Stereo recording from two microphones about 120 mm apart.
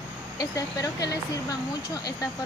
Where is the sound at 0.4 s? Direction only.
30° left (ahead or behind).